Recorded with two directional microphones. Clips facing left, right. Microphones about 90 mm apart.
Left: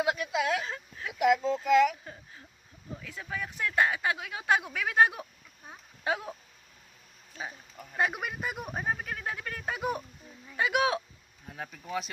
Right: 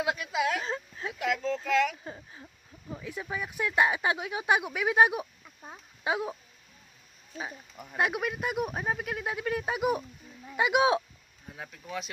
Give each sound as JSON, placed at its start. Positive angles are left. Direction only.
{"t": 0.0, "sound": "a sound", "side_deg": 5}
{"t": 0.6, "sound": "a sound", "side_deg": -25}
{"t": 1.2, "sound": "speech", "side_deg": 15}
{"t": 3.0, "sound": "speech", "side_deg": -15}
{"t": 7.8, "sound": "speech", "side_deg": -5}
{"t": 11.5, "sound": "speech", "side_deg": 0}